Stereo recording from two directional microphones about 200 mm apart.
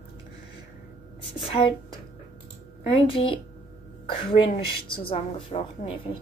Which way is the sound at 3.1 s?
25° left (ahead or behind).